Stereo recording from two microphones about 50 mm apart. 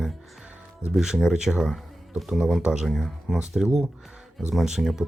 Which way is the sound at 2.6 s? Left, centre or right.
Centre.